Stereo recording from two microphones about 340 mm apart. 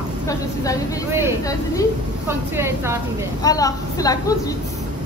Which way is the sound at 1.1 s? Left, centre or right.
Centre.